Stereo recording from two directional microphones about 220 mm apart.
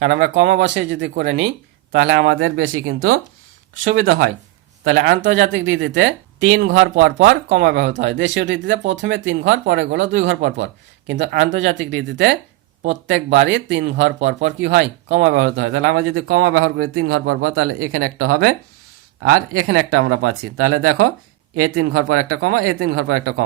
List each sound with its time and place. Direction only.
0.0 s speech: 50° right (ahead or behind); by 3.2 s 70° right (ahead or behind)
4.8 s speech: 55° right (ahead or behind); by 23.3 s 80° right